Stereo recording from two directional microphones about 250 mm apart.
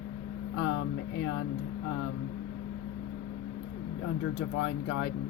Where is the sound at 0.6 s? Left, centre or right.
Left.